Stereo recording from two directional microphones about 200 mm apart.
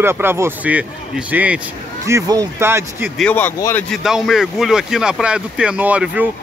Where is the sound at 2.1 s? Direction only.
15° right (ahead or behind).